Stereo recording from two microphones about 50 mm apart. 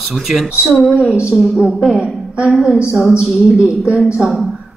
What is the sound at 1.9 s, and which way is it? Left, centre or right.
Speech, right.